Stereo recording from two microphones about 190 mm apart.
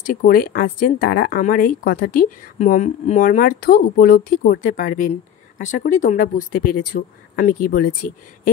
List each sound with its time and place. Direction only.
0.0 s speech: 45° left (ahead or behind)